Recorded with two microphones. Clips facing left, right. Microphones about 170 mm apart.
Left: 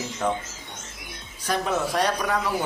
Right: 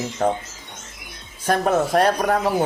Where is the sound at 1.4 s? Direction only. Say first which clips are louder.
Right 6 dB; 50° right (ahead or behind).